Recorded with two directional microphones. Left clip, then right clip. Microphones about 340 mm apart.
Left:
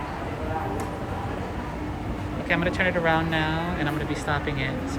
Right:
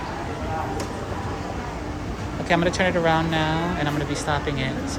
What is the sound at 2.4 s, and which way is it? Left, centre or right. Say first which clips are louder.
Speech: right 3 dB; centre.